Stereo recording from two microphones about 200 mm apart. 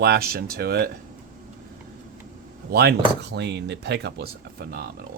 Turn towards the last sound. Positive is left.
turn(degrees=-45)  # may be behind; listen again after turning